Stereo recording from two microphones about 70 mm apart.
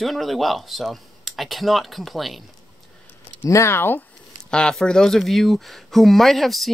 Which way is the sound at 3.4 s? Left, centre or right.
Left.